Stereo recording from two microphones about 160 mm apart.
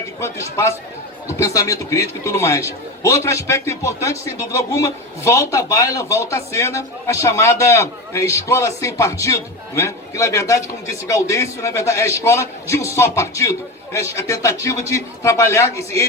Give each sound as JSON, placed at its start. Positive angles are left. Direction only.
{"t": 1.3, "sound": "a man's voice", "side_deg": 20}